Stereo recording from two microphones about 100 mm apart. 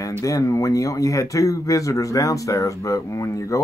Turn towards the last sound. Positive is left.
turn(degrees=30)  # may be behind; listen again after turning